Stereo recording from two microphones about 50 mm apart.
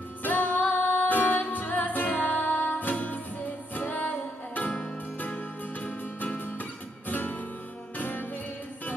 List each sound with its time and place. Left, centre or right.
0.2 s music: left